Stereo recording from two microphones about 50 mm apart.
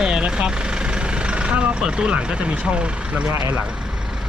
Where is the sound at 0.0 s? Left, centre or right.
Centre.